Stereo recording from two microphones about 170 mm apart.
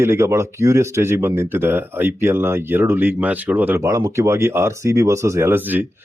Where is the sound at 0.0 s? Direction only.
15° right (ahead or behind).